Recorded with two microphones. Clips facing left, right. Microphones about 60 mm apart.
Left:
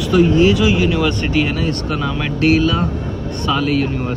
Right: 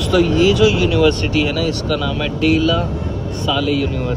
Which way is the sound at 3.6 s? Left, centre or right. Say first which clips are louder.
Right 1 dB; left.